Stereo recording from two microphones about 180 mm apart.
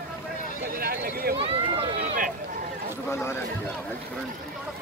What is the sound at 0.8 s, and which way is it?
Speech, 55° right (ahead or behind).